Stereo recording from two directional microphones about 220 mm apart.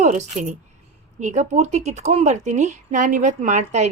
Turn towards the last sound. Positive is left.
turn(degrees=-30)  # may be behind; listen again after turning